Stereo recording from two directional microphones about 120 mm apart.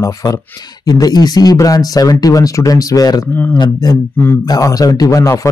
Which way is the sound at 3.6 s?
30° left (ahead or behind).